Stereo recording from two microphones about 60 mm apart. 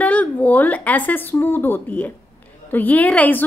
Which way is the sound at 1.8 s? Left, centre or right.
Left.